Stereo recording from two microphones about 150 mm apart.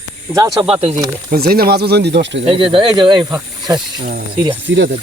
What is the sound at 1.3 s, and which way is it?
Speech, 90° right.